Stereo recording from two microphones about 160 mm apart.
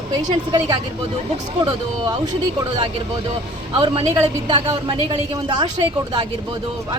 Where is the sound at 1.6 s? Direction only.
30° right (ahead or behind).